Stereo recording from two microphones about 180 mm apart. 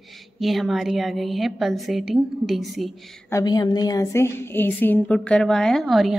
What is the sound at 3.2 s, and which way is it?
A woman's voice, 20° left (ahead or behind).